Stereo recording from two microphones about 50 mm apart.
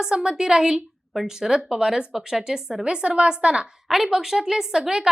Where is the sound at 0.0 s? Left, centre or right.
Centre.